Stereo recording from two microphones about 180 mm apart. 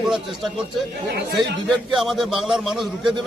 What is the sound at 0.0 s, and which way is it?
Speech, centre (ahead or behind).